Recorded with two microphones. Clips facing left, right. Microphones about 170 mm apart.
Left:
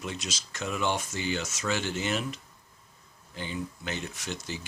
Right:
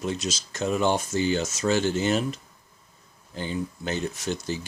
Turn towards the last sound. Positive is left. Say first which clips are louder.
# right 7 dB
turn(degrees=-40)  # may be behind; listen again after turning